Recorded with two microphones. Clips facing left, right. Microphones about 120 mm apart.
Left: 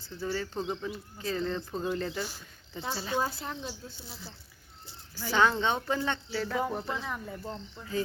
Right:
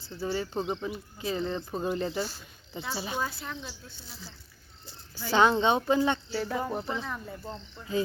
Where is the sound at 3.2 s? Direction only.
35° left (ahead or behind).